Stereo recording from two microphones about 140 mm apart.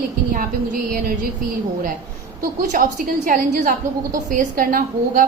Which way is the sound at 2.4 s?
75° right (ahead or behind).